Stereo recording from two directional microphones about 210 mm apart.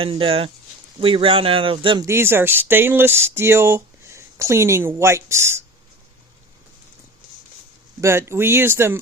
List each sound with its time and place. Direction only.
0.0 s speech: 25° right (ahead or behind)
8.0 s speech: 10° right (ahead or behind)